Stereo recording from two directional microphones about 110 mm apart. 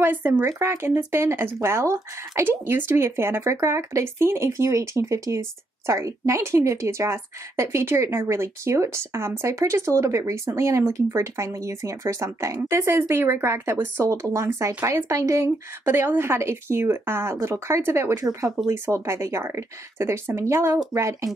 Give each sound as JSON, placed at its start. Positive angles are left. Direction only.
{"t": 0.0, "sound": "speech", "side_deg": -20}